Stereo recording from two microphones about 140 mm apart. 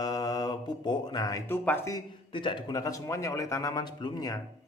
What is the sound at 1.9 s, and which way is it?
Speech, 35° left (ahead or behind).